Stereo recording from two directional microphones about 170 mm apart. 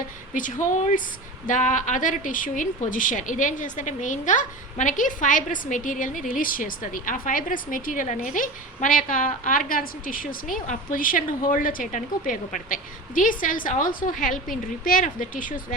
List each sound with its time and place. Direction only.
0.3 s a woman's voice: 50° left (ahead or behind)